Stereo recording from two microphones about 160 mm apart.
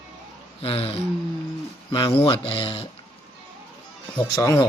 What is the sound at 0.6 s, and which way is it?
Speech, 35° left (ahead or behind).